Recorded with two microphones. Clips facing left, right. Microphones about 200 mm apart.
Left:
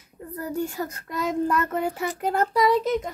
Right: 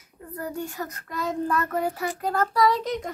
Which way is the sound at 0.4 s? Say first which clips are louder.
Left 3 dB; 30° left (ahead or behind).